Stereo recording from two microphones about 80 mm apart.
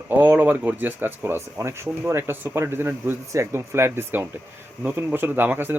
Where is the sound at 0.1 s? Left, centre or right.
Right.